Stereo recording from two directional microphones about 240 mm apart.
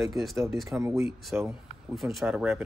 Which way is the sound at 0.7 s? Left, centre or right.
Centre.